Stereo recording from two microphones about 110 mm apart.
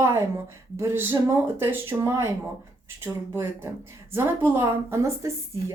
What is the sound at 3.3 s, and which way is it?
A woman's voice, 20° right (ahead or behind).